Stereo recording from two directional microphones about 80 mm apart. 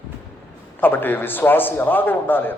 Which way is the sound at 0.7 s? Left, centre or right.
Left.